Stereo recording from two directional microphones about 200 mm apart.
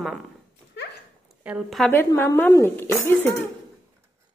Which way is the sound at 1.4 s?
5° right (ahead or behind).